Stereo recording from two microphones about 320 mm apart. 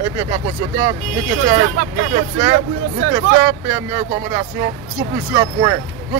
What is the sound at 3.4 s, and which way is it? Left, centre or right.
Speech, centre.